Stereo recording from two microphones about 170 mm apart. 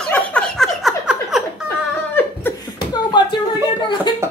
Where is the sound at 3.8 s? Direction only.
25° left (ahead or behind).